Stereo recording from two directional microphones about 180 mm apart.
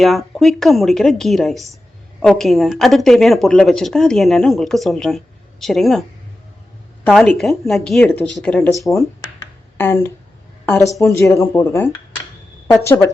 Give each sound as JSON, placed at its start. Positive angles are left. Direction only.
{"t": 0.0, "sound": "a woman's voice", "side_deg": 0}
{"t": 9.7, "sound": "speech", "side_deg": 10}